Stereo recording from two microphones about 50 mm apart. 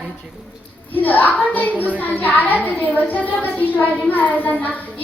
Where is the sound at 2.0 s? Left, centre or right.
Left.